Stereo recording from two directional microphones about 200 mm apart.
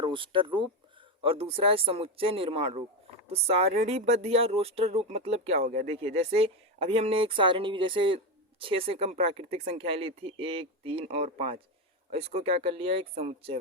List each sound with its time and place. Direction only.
0.0 s speech: 25° right (ahead or behind)